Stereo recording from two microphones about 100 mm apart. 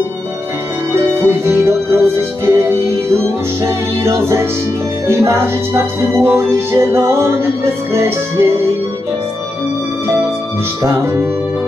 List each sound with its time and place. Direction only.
0.9 s music: 25° right (ahead or behind)